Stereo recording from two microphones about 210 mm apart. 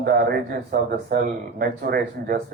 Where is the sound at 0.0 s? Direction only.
50° right (ahead or behind).